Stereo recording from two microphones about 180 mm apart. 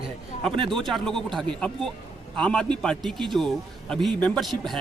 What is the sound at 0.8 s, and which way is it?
A man's voice, centre (ahead or behind).